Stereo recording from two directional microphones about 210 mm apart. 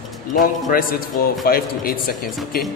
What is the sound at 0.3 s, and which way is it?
A man's voice, 40° left (ahead or behind).